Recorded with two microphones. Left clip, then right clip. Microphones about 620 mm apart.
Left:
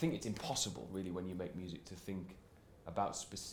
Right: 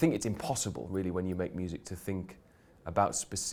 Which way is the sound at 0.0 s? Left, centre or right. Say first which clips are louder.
Right 10 dB; right.